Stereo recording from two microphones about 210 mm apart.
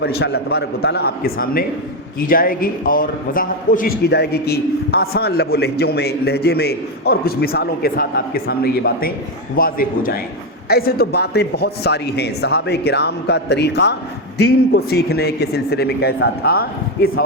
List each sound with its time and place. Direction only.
0.0 s a man's voice: 50° left (ahead or behind)